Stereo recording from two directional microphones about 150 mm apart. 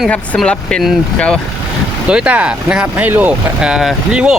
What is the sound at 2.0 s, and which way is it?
Speech, 5° right (ahead or behind).